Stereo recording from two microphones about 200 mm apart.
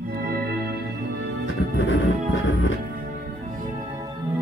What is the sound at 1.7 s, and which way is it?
Music, 75° left (ahead or behind).